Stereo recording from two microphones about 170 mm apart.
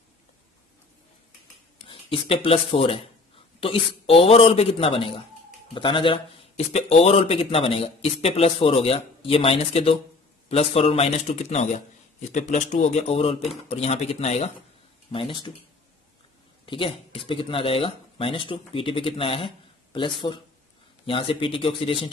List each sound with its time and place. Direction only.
1.8 s a man's voice: 30° left (ahead or behind)
16.6 s a man's voice: 30° left (ahead or behind)